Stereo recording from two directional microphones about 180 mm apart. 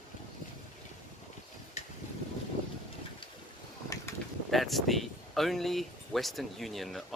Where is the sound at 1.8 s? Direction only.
40° left (ahead or behind).